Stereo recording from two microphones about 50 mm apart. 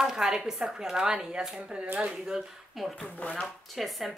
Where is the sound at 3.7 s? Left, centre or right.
Centre.